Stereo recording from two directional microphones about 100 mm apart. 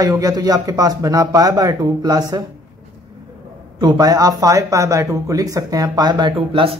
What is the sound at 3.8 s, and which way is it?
A man's voice, 40° right (ahead or behind).